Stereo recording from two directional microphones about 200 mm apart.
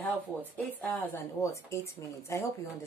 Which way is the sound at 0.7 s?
10° left (ahead or behind).